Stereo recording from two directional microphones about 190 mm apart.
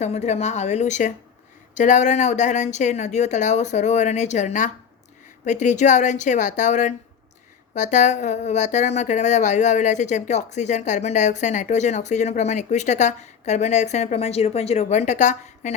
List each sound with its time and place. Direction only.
0.0 s speech: 35° left (ahead or behind)